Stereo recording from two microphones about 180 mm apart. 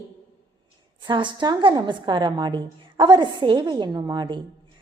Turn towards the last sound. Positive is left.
turn(degrees=-25)  # may be behind; listen again after turning